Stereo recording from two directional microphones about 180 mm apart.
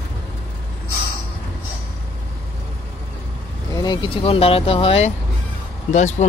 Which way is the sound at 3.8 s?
25° left (ahead or behind).